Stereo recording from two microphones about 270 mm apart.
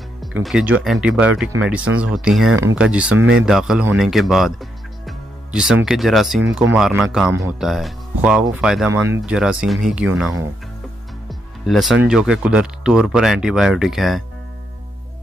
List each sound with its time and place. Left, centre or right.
0.2 s speech: centre
3.2 s speech: right
3.4 s speech: centre
11.2 s music: centre
12.0 s speech: centre